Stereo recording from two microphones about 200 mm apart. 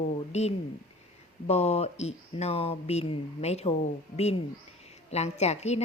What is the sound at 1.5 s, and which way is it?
A woman's voice, 30° left (ahead or behind).